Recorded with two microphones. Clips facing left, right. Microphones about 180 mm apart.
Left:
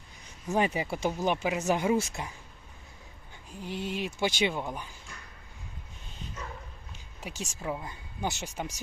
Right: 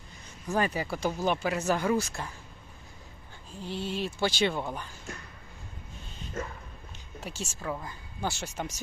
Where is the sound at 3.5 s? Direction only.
15° left (ahead or behind).